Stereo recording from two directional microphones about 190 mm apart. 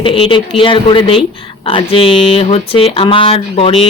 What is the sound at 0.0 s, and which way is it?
Speech, 30° left (ahead or behind).